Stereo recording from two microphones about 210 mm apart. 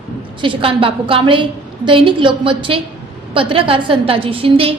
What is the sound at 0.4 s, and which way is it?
A woman's voice, 25° right (ahead or behind).